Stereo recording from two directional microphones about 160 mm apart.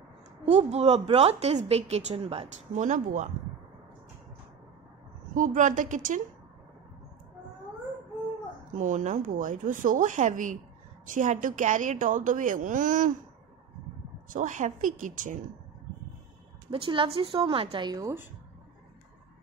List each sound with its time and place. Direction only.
0.5 s a woman's voice: 40° right (ahead or behind)
5.3 s a woman's voice: 55° right (ahead or behind)
8.7 s a woman's voice: 50° right (ahead or behind)
14.3 s a woman's voice: 50° right (ahead or behind)
16.7 s a woman's voice: 30° right (ahead or behind)